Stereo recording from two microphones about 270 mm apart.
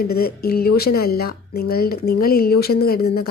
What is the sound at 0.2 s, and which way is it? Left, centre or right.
Speech, left.